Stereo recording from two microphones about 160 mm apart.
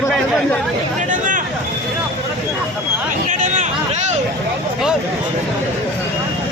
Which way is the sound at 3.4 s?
55° right (ahead or behind).